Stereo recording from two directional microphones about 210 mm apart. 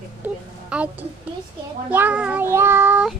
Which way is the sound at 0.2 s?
5° right (ahead or behind).